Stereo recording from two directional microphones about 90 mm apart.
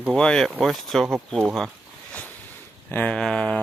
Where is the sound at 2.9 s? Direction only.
15° left (ahead or behind).